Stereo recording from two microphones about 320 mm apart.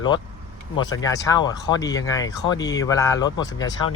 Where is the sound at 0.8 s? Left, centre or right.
Centre.